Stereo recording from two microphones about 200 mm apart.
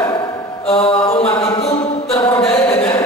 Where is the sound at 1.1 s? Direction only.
30° left (ahead or behind).